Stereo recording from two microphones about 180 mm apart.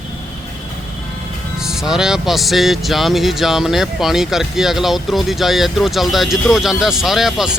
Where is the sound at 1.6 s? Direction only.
5° right (ahead or behind).